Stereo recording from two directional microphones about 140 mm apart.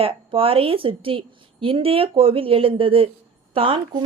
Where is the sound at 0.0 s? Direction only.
40° right (ahead or behind).